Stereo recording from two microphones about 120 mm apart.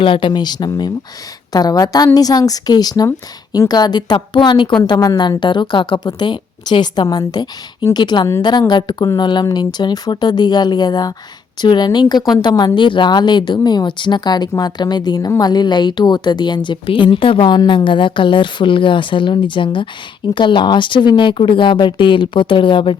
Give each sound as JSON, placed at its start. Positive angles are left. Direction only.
{"t": 0.0, "sound": "a woman's voice", "side_deg": 45}